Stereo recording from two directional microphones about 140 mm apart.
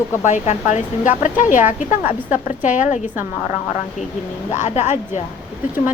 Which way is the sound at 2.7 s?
65° left (ahead or behind).